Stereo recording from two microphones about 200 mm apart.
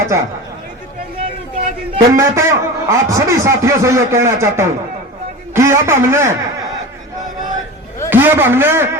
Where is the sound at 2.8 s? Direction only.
15° right (ahead or behind).